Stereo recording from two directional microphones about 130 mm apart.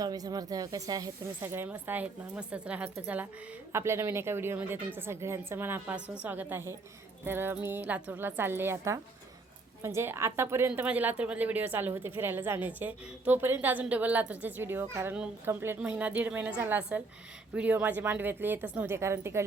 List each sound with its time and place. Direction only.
0.0 s a woman's voice: 30° right (ahead or behind)
1.4 s a woman's voice: 15° right (ahead or behind)